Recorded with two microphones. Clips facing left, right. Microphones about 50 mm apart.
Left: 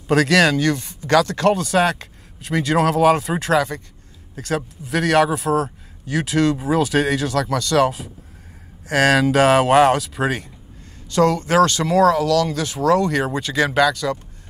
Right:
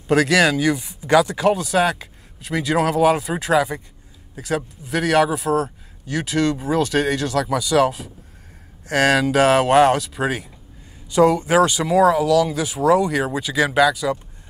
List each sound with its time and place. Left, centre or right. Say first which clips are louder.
0.1 s a man's voice: left 1 dB; centre
11.1 s speech: right 2 dB; centre